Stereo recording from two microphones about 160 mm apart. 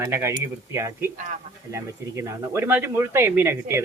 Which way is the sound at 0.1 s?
15° right (ahead or behind).